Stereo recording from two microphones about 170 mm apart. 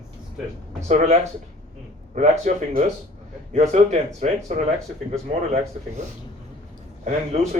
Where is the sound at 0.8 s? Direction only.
40° right (ahead or behind).